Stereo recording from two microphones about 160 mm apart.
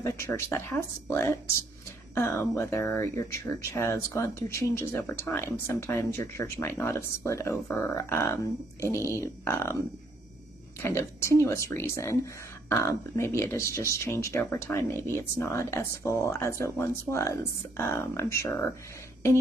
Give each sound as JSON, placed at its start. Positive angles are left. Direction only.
{"t": 0.0, "sound": "speech", "side_deg": 15}
{"t": 10.8, "sound": "speech", "side_deg": 15}